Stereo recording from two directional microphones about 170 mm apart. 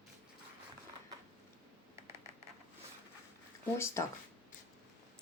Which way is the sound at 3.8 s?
15° left (ahead or behind).